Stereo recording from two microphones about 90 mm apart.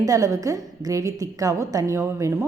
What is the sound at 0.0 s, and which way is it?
A woman's voice, 40° right (ahead or behind).